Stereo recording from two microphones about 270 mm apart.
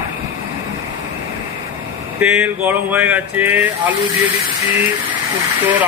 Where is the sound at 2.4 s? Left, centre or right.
Centre.